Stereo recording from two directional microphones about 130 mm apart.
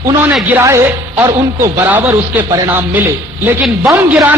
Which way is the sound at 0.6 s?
20° right (ahead or behind).